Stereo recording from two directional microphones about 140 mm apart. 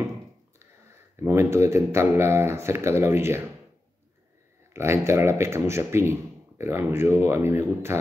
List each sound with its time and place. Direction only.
1.2 s speech: 20° right (ahead or behind)
4.7 s speech: 20° right (ahead or behind)